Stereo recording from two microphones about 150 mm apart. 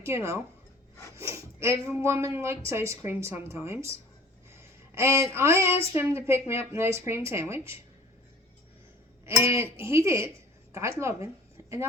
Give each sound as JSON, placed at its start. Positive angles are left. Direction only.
{"t": 0.0, "sound": "speech", "side_deg": -15}
{"t": 5.7, "sound": "speech", "side_deg": 40}
{"t": 6.0, "sound": "speech", "side_deg": -15}
{"t": 9.2, "sound": "a woman's voice", "side_deg": -15}